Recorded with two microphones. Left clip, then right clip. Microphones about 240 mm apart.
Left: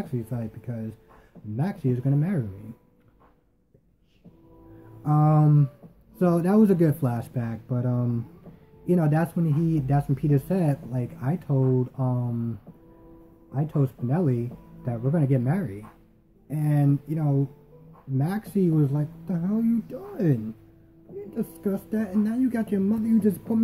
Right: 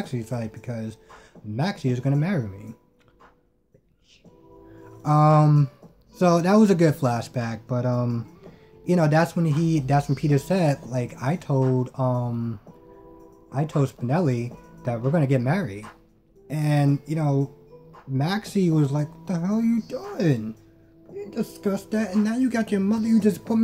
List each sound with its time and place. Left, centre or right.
0.0 s speech: centre
5.0 s speech: centre
11.5 s speech: right
11.8 s speech: centre
13.5 s speech: centre